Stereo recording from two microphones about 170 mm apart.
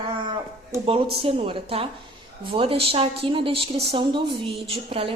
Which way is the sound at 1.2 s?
35° right (ahead or behind).